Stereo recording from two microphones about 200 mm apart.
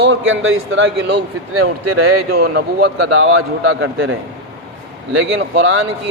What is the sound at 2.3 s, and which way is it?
Speech, 50° right (ahead or behind).